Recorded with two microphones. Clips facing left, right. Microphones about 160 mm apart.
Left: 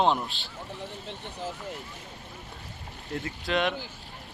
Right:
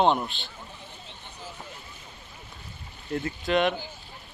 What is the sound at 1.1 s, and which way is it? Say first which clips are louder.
Vehicle: left 8 dB; 70° left (ahead or behind).